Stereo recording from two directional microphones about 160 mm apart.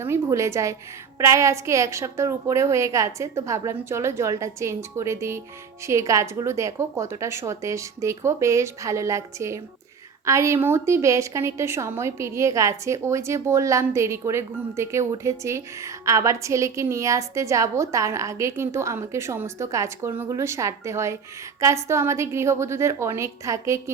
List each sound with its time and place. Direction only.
0.0 s a woman's voice: 15° right (ahead or behind)